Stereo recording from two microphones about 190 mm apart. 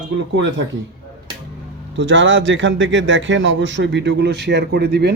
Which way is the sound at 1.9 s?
75° right (ahead or behind).